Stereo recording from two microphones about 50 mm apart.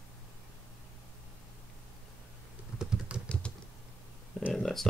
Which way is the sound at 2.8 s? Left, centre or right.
Centre.